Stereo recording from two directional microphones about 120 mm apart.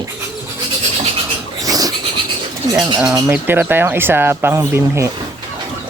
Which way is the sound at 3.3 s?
15° right (ahead or behind).